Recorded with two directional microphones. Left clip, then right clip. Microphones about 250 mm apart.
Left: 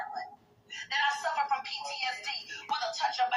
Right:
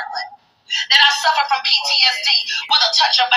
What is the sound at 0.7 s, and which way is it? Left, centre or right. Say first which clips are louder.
Speech: right 17 dB; right.